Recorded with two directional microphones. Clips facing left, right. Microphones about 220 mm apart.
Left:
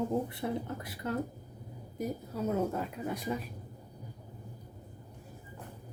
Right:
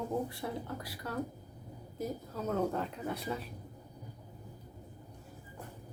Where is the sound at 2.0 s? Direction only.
10° left (ahead or behind).